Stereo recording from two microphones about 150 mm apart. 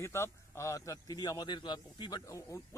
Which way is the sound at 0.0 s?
15° left (ahead or behind).